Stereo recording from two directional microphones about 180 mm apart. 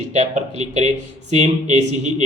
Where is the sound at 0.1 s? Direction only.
40° right (ahead or behind).